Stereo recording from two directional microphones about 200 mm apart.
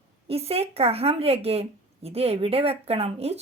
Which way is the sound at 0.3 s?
30° right (ahead or behind).